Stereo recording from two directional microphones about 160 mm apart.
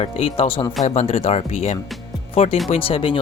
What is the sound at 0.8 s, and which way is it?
Speech, 45° left (ahead or behind).